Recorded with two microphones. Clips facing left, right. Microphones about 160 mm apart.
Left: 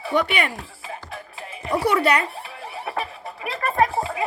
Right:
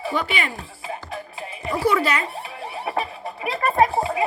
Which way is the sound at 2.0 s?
60° left (ahead or behind).